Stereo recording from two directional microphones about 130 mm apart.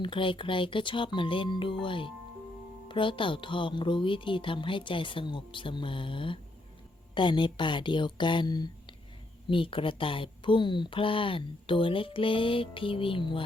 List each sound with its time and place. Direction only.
0.0 s speech: 40° left (ahead or behind)